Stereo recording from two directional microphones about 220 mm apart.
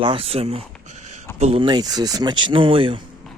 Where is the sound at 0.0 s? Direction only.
25° right (ahead or behind).